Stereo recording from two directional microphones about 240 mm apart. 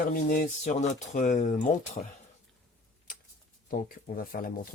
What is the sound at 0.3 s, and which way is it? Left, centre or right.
Speech, left.